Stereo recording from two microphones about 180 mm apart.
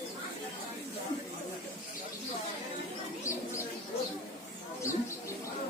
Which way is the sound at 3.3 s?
15° left (ahead or behind).